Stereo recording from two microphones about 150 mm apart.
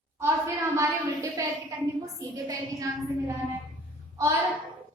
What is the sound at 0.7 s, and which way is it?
A woman's voice, 20° right (ahead or behind).